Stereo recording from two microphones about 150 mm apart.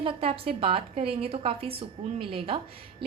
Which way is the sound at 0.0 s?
35° right (ahead or behind).